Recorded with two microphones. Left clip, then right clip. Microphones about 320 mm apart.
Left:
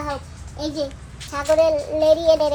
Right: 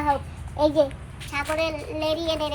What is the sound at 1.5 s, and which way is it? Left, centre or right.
Child singing, centre.